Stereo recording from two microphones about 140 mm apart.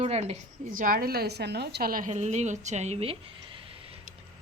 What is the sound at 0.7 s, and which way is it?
A woman's voice, 85° right.